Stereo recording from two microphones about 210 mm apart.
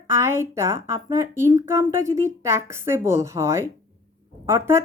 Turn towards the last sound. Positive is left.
turn(degrees=-10)  # may be behind; listen again after turning